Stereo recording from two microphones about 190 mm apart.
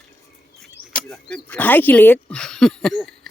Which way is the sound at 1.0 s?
5° left (ahead or behind).